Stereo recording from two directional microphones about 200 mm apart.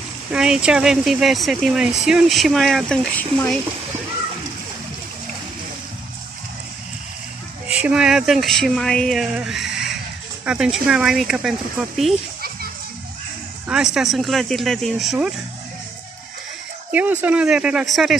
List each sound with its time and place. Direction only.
0.3 s speech: 5° right (ahead or behind)
7.8 s speech: 5° right (ahead or behind)
13.7 s speech: 5° right (ahead or behind)
16.9 s speech: 10° right (ahead or behind)